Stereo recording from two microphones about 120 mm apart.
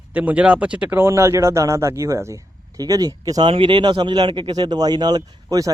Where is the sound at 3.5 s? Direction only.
45° right (ahead or behind).